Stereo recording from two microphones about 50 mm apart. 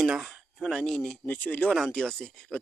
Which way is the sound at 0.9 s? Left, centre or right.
Centre.